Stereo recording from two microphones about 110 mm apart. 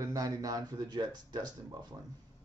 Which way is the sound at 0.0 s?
30° right (ahead or behind).